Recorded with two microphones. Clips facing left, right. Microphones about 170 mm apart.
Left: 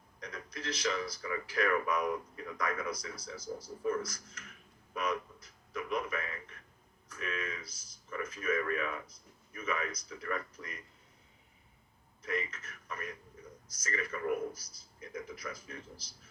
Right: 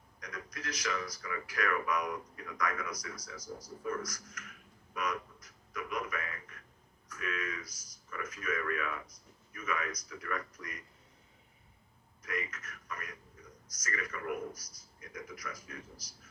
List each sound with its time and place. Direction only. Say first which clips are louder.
0.2 s speech: left 1 dB; 30° left (ahead or behind)
4.9 s a sound: left 2 dB; 30° left (ahead or behind)
7.1 s speech: even; 30° left (ahead or behind)
12.2 s speech: left 3 dB; 30° left (ahead or behind)